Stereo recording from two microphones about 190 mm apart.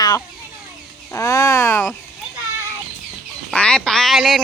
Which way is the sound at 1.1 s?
15° left (ahead or behind).